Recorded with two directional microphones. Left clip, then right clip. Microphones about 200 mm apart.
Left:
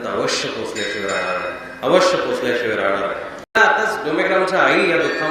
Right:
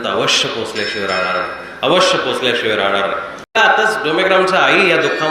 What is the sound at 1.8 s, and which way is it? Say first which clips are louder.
Speech: right 1 dB; 20° right (ahead or behind).